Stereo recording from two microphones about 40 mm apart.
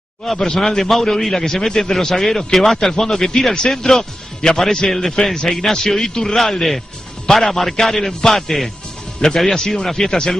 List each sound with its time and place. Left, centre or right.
0.6 s a man's voice: centre